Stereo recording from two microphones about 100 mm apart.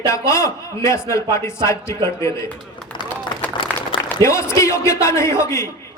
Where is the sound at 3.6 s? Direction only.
60° left (ahead or behind).